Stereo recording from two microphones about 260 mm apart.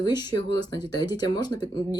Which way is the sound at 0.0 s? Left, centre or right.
Centre.